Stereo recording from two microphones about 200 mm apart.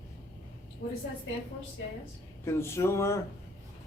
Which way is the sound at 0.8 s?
50° left (ahead or behind).